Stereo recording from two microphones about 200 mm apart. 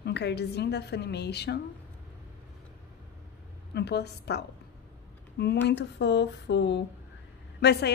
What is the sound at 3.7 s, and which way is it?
A woman's voice, 55° left (ahead or behind).